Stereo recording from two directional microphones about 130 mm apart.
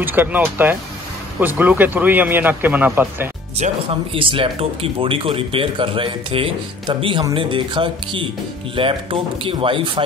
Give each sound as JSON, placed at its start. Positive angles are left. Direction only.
{"t": 0.0, "sound": "a man's voice", "side_deg": -15}
{"t": 3.6, "sound": "speech", "side_deg": -65}
{"t": 4.1, "sound": "speech", "side_deg": -45}